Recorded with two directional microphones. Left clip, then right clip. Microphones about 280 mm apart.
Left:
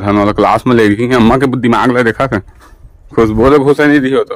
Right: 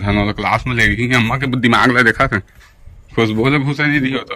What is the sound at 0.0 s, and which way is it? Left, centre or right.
A man's voice, centre.